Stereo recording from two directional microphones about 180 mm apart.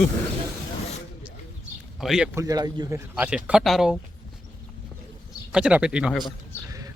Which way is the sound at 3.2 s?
5° right (ahead or behind).